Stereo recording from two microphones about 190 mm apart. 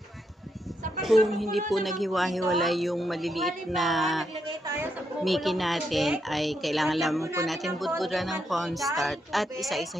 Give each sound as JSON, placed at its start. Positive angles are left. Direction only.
{"t": 1.0, "sound": "a woman's voice", "side_deg": 0}
{"t": 4.5, "sound": "a woman's voice", "side_deg": -15}
{"t": 5.2, "sound": "a woman's voice", "side_deg": 0}